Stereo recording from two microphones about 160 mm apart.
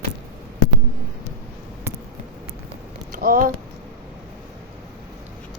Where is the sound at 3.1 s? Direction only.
60° right (ahead or behind).